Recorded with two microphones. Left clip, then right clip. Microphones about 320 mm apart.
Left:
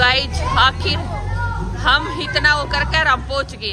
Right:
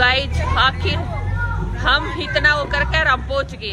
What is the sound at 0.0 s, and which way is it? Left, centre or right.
Vehicle, centre.